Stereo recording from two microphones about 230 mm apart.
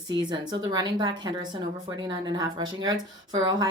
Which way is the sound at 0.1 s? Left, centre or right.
Centre.